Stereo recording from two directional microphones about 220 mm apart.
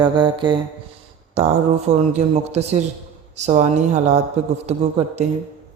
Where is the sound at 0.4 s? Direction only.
20° right (ahead or behind).